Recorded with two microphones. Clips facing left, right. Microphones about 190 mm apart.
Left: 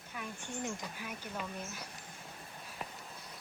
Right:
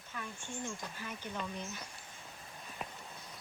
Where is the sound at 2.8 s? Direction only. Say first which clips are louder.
Even; centre (ahead or behind).